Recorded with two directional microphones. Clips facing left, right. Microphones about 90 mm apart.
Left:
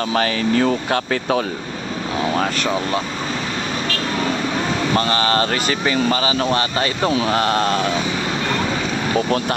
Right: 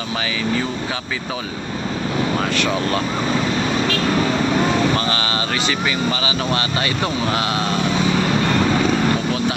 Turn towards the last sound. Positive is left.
turn(degrees=45)  # may be behind; listen again after turning